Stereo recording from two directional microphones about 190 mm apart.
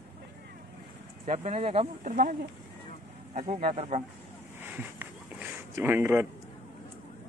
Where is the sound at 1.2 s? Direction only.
35° right (ahead or behind).